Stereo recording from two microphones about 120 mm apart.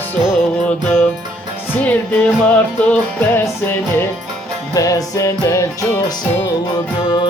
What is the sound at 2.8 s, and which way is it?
Music, 15° left (ahead or behind).